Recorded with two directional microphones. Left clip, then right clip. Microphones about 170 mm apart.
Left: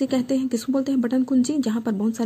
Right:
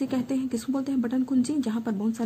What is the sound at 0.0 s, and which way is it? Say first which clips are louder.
Speech: left 6 dB; 30° left (ahead or behind).